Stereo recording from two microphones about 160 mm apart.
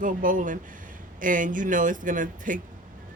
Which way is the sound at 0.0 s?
55° right (ahead or behind).